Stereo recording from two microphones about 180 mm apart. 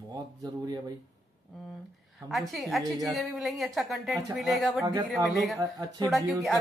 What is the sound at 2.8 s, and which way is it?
Speech, 20° right (ahead or behind).